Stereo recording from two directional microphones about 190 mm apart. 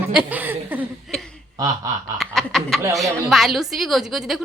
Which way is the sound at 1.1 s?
5° left (ahead or behind).